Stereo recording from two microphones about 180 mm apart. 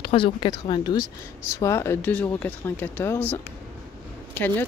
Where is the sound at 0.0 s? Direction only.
30° left (ahead or behind).